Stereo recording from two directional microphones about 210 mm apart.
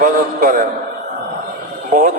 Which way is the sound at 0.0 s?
40° right (ahead or behind).